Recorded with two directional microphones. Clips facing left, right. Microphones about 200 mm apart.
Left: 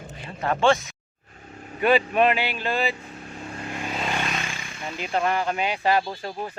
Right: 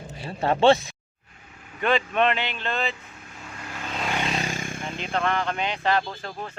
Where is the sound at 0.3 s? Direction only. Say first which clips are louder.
Right 3 dB; 30° right (ahead or behind).